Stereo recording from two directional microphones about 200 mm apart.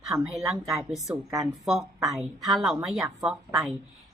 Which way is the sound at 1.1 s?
15° right (ahead or behind).